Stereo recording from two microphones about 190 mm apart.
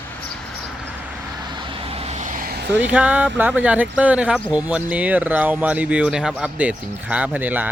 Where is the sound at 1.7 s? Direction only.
30° right (ahead or behind); by 2.6 s 50° right (ahead or behind).